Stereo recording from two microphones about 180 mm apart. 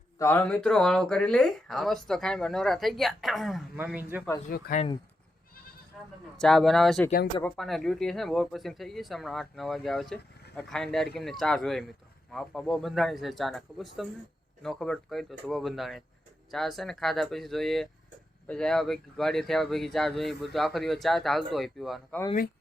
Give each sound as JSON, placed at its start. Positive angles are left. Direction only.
{"t": 0.2, "sound": "speech", "side_deg": 10}
{"t": 4.4, "sound": "speech", "side_deg": 55}
{"t": 6.3, "sound": "speech", "side_deg": 5}